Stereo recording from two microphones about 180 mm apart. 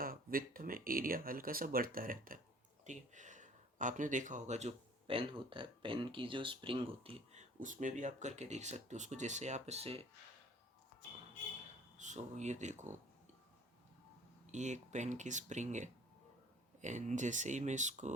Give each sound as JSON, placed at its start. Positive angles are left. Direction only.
{"t": 0.0, "sound": "speech", "side_deg": -55}
{"t": 7.6, "sound": "speech", "side_deg": -45}
{"t": 11.9, "sound": "speech", "side_deg": -40}
{"t": 14.5, "sound": "speech", "side_deg": -40}